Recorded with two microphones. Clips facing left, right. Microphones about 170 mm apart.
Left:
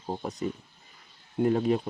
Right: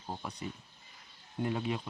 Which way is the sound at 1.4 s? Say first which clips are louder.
Left 10 dB; 40° left (ahead or behind).